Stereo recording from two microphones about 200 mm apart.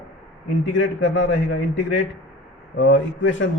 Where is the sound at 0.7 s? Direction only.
70° left (ahead or behind).